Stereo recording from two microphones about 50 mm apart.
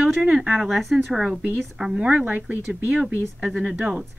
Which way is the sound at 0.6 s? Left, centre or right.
Centre.